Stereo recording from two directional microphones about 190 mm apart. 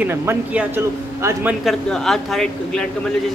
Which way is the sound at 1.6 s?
Centre (ahead or behind).